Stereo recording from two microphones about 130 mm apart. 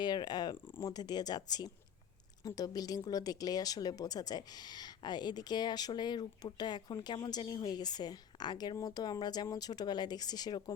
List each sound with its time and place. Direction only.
0.0 s speech: 35° left (ahead or behind)